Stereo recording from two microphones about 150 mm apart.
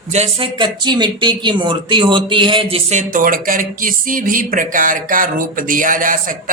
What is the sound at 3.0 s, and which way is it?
A man's voice, 65° right (ahead or behind).